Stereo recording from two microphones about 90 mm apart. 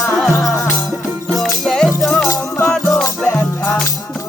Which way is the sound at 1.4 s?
5° left (ahead or behind).